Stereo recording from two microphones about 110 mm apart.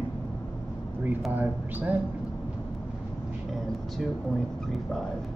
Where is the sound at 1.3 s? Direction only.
15° right (ahead or behind).